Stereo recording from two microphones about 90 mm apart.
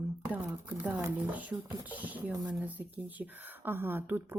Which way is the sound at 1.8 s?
15° right (ahead or behind).